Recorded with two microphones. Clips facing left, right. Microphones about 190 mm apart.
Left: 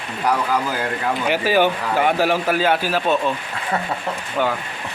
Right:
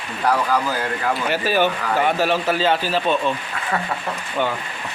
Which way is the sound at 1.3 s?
15° left (ahead or behind).